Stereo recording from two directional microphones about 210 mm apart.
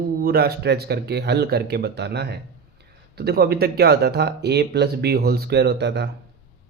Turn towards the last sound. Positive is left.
turn(degrees=-55)  # may be behind; listen again after turning